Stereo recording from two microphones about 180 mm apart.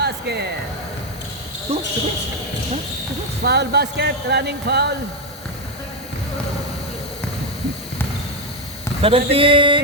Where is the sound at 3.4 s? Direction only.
65° right (ahead or behind).